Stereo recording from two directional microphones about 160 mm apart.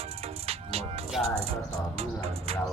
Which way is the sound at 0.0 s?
40° right (ahead or behind).